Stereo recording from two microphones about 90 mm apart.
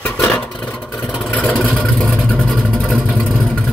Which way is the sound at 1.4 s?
5° left (ahead or behind).